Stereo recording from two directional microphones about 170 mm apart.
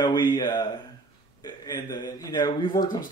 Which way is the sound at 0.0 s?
25° left (ahead or behind).